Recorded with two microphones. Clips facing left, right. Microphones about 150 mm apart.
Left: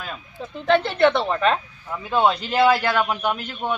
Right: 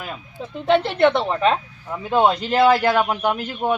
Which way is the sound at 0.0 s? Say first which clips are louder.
Right 2 dB; 10° right (ahead or behind).